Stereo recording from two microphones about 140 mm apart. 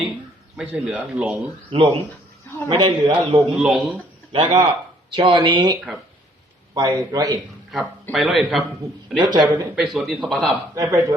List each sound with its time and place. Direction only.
0.5 s a man's voice: 10° right (ahead or behind)
1.7 s a man's voice: 35° right (ahead or behind)
3.5 s a man's voice: 5° right (ahead or behind)
4.3 s a man's voice: 40° right (ahead or behind)
6.7 s a man's voice: 25° right (ahead or behind)
8.1 s speech: centre (ahead or behind)
9.1 s a man's voice: 35° right (ahead or behind)
9.7 s speech: centre (ahead or behind)
10.8 s a man's voice: 20° right (ahead or behind)